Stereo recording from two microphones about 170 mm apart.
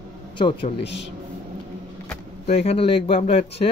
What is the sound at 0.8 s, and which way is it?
Speech, 90° left.